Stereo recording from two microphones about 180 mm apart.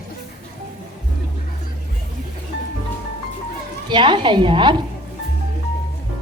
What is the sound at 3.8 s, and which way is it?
Speech, 25° right (ahead or behind).